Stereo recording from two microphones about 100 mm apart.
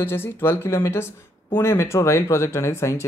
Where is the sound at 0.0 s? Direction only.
25° left (ahead or behind).